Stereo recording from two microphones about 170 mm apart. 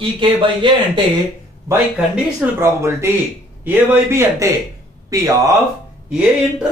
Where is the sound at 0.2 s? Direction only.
30° right (ahead or behind).